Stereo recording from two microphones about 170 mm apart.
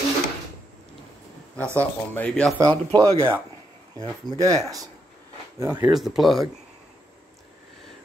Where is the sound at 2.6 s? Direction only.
25° right (ahead or behind).